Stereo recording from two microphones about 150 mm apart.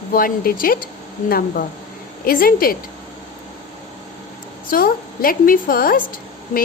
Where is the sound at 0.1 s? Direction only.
70° left (ahead or behind).